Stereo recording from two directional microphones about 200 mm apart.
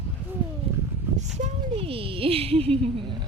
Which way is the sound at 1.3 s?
30° right (ahead or behind).